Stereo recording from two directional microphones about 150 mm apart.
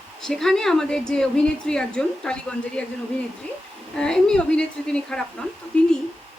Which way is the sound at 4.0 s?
5° left (ahead or behind).